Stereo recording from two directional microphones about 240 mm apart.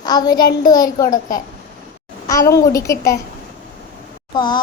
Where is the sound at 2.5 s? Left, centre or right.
Centre.